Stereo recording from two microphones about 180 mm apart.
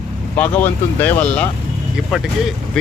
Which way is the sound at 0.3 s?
10° left (ahead or behind).